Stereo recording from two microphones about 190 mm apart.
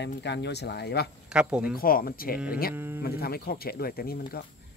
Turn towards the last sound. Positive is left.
turn(degrees=50)  # may be behind; listen again after turning